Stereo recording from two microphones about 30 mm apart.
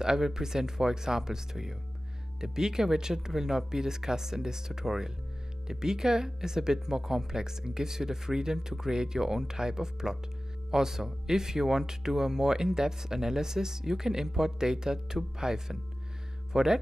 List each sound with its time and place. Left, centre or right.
0.0 s speech: centre